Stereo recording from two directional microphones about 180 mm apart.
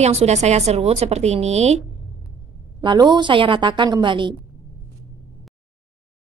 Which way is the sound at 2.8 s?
25° right (ahead or behind).